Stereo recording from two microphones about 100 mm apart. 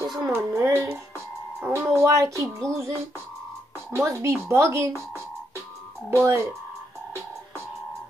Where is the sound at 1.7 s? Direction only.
25° right (ahead or behind).